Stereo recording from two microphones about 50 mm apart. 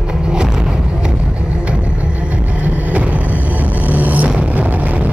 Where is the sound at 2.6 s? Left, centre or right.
Right.